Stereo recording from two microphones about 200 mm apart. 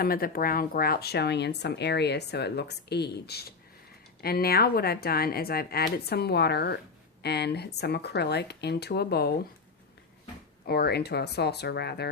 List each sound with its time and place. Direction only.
0.0 s a woman's voice: 50° left (ahead or behind)
10.7 s speech: 50° left (ahead or behind)